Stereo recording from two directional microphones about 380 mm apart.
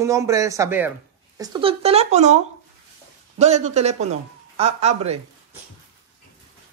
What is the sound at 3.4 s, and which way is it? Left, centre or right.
Speech, centre.